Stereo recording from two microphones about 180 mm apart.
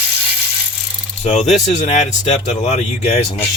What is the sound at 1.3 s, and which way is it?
Speech, 40° left (ahead or behind).